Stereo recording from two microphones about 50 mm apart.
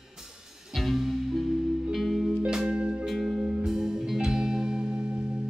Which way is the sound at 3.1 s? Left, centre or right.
Centre.